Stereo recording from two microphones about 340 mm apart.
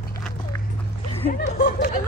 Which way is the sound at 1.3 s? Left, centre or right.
Left.